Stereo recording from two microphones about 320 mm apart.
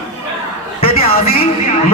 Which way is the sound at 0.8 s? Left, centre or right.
Centre.